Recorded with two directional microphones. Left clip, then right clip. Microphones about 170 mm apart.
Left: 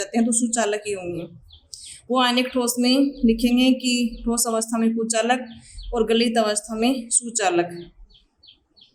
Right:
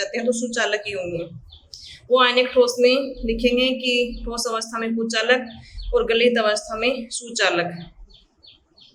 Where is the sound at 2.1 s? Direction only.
35° left (ahead or behind).